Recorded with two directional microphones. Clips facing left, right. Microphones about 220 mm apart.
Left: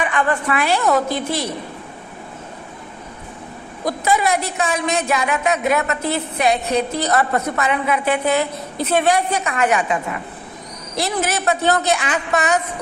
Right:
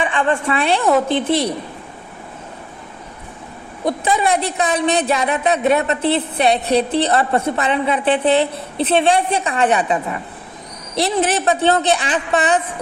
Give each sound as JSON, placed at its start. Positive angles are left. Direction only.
{"t": 0.0, "sound": "a woman's voice", "side_deg": -30}
{"t": 3.8, "sound": "a woman's voice", "side_deg": -30}